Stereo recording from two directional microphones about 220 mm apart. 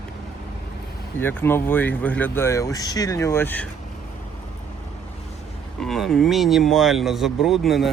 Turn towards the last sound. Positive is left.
turn(degrees=0)  # may be behind; listen again after turning